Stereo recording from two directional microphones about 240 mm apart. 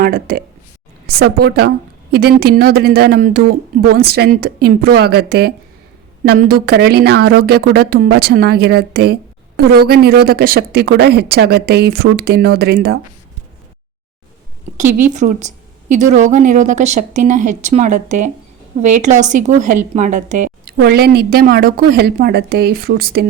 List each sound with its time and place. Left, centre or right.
0.0 s a woman's voice: right
14.8 s a woman's voice: right
20.8 s a woman's voice: right